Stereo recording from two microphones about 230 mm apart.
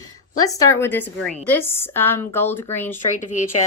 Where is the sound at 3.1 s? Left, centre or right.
Left.